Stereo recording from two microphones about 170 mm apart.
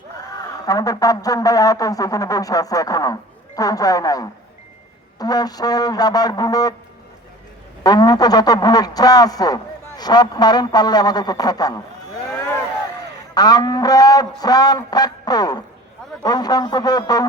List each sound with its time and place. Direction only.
0.3 s speech: 20° left (ahead or behind)
7.9 s speech: 25° left (ahead or behind)
13.3 s speech: 25° left (ahead or behind)